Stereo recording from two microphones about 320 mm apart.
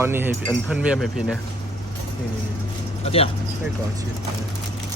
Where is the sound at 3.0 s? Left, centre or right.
Centre.